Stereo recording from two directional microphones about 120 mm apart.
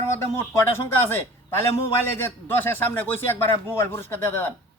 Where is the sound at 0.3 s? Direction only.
20° left (ahead or behind).